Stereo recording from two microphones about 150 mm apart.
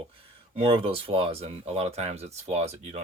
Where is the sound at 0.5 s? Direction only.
40° right (ahead or behind).